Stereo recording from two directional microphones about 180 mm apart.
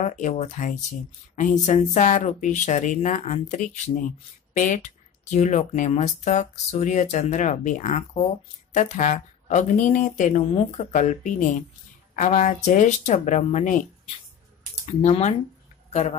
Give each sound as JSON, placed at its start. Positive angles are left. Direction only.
{"t": 0.0, "sound": "speech", "side_deg": 45}
{"t": 15.0, "sound": "a man's voice", "side_deg": 40}